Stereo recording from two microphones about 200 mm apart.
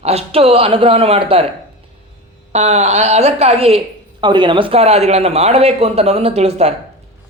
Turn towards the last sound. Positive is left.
turn(degrees=-35)  # may be behind; listen again after turning